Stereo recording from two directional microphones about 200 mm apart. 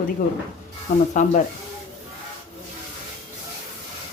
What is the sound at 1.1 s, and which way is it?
Speech, 40° left (ahead or behind).